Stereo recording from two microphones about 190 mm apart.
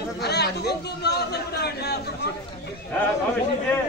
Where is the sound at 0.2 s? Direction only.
60° left (ahead or behind).